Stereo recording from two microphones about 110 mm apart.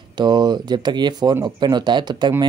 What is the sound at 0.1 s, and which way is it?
Speech, 40° right (ahead or behind).